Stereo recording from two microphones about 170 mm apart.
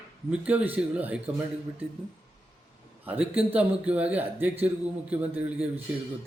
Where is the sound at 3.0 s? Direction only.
10° right (ahead or behind).